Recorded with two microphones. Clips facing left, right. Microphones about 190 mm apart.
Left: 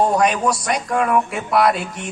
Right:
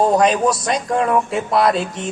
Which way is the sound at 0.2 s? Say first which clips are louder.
Right 2 dB; 25° right (ahead or behind).